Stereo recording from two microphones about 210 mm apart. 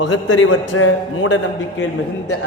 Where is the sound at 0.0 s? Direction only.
65° left (ahead or behind).